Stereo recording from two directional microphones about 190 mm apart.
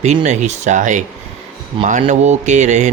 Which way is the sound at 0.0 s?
35° right (ahead or behind).